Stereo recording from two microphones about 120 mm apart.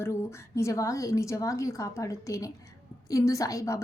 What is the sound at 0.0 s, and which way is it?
A woman's voice, 20° left (ahead or behind).